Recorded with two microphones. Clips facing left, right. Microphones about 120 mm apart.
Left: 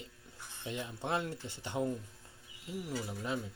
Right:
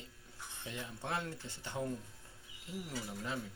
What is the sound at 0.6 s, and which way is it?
Speech, 20° left (ahead or behind).